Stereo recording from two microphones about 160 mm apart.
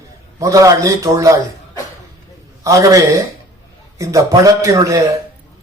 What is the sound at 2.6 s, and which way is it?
A man's voice, 20° right (ahead or behind).